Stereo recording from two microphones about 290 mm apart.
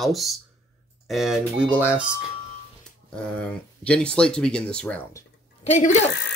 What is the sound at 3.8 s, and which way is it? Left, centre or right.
Speech, centre.